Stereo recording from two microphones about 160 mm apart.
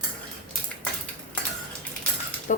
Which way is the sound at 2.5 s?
55° left (ahead or behind).